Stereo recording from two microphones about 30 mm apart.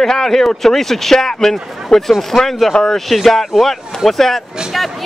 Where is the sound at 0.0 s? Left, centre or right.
Centre.